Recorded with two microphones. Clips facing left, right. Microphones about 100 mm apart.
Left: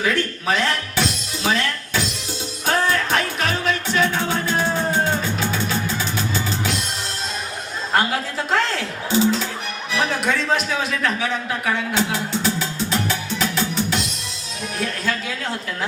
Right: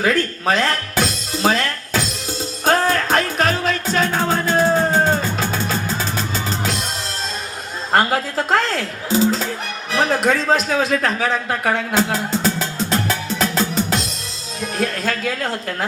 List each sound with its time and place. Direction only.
0.0 s music: 45° right (ahead or behind)
7.9 s music: 40° right (ahead or behind)
9.9 s a sound: 40° right (ahead or behind)
14.8 s speech: 50° right (ahead or behind)